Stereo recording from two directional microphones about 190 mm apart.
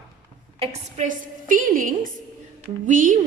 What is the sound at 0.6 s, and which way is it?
A woman's voice, 40° right (ahead or behind).